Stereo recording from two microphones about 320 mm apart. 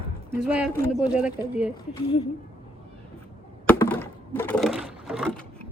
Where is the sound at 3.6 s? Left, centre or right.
Centre.